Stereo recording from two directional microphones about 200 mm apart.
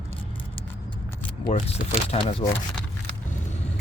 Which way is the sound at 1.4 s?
30° left (ahead or behind).